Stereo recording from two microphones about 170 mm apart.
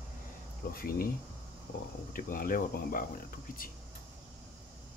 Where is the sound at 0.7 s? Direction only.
60° left (ahead or behind).